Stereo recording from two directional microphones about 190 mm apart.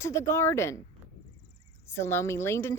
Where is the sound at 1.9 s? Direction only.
15° left (ahead or behind).